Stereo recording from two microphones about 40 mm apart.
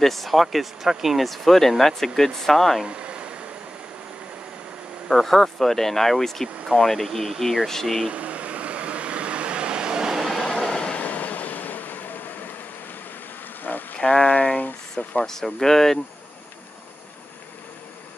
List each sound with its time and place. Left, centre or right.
0.0 s speech: centre
2.9 s a sound: right
5.0 s speech: centre
8.1 s vehicle: right
10.1 s train: centre
10.5 s train: centre
10.9 s train: left
13.9 s a sound: left
15.2 s speech: centre